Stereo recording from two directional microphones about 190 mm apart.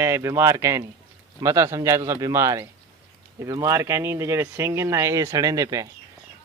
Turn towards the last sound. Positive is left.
turn(degrees=-20)  # may be behind; listen again after turning